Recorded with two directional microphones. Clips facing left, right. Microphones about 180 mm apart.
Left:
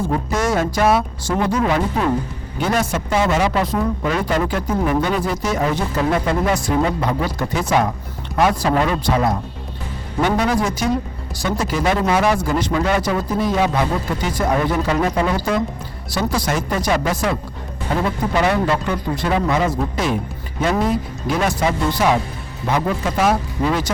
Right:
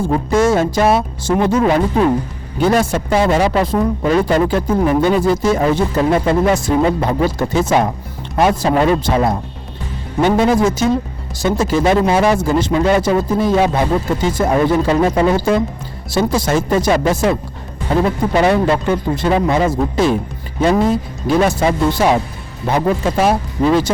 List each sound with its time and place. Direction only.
0.0 s speech: 30° right (ahead or behind)